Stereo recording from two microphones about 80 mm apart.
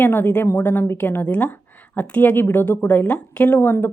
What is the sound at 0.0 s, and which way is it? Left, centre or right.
A woman's voice, left.